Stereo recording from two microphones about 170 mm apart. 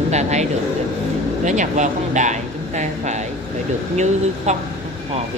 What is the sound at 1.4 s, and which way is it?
Speech, 45° right (ahead or behind).